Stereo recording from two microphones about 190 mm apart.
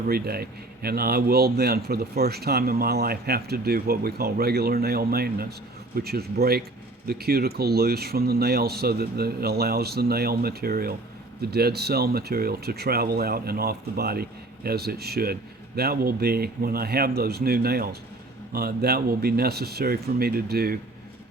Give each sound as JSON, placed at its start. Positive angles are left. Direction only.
{"t": 0.1, "sound": "a man's voice", "side_deg": -55}